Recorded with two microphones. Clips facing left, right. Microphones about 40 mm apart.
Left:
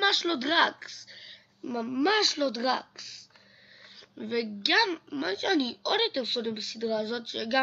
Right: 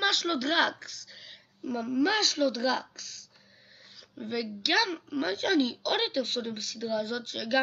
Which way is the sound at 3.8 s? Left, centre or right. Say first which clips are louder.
Left 1 dB; centre.